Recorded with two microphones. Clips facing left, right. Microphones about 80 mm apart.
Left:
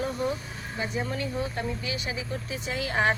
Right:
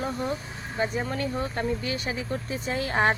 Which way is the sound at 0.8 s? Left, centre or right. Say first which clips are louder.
Right 3 dB; right.